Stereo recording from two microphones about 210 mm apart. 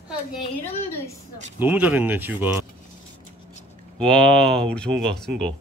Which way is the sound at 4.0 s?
5° left (ahead or behind).